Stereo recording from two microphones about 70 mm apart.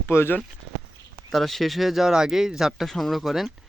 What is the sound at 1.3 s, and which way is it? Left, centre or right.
A man's voice, centre.